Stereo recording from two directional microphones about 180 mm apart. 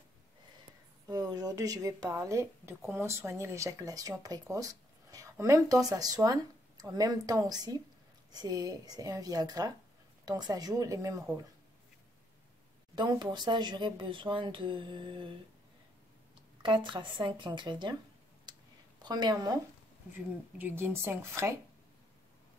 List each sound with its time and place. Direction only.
1.3 s speech: 20° right (ahead or behind)
12.9 s speech: 25° right (ahead or behind)
16.6 s speech: 25° right (ahead or behind)
19.0 s speech: 25° right (ahead or behind)